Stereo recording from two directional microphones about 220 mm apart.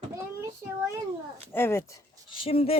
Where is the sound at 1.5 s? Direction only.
10° left (ahead or behind).